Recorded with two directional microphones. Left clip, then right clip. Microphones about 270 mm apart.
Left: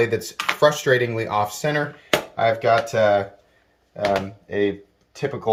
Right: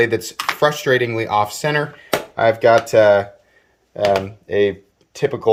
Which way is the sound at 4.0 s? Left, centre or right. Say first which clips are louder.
Right 5 dB; right.